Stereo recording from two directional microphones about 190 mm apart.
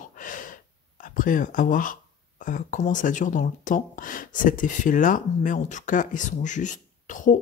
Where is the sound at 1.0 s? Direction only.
45° left (ahead or behind).